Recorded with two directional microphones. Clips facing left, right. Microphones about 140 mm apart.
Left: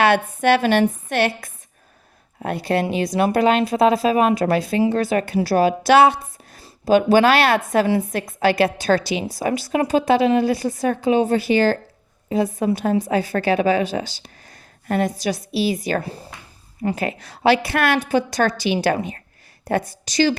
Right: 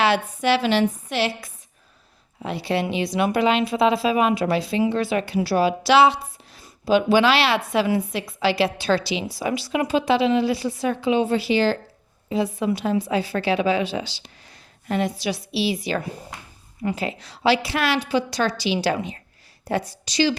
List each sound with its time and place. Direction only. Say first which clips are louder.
0.0 s a woman's voice: left 4 dB; 55° left (ahead or behind)